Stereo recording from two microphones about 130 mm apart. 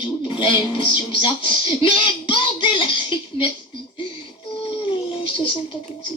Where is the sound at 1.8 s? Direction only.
40° left (ahead or behind).